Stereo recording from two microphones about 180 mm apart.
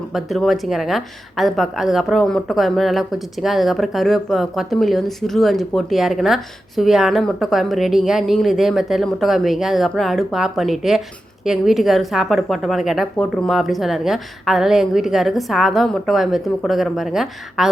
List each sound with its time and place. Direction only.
0.1 s a woman's voice: centre (ahead or behind)